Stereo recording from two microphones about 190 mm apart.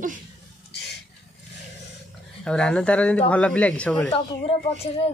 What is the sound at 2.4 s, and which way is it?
Speech, 5° left (ahead or behind).